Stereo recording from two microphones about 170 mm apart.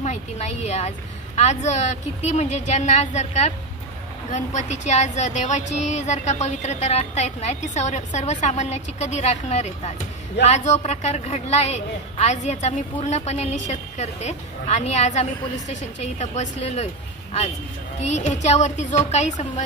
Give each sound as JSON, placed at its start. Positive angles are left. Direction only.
{"t": 0.0, "sound": "a woman's voice", "side_deg": 40}